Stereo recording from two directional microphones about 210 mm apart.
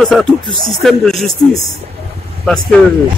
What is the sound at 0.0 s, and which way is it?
Speech, centre (ahead or behind).